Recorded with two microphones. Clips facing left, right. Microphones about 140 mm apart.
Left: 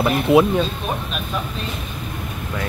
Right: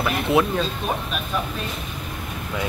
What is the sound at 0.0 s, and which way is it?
Speech, 20° left (ahead or behind).